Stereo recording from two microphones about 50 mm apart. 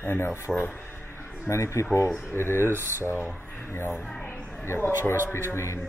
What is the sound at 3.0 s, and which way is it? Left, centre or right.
Speech, left.